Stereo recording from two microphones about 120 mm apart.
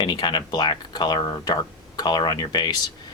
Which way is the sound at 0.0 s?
40° left (ahead or behind).